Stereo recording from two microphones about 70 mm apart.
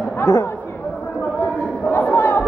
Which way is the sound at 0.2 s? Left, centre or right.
Left.